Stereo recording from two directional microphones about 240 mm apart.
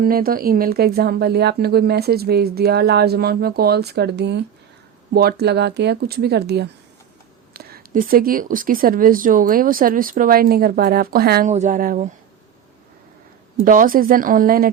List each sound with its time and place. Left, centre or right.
0.0 s speech: right
13.6 s speech: right